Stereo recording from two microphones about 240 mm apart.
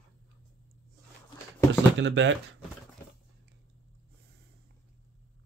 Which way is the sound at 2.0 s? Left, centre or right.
Right.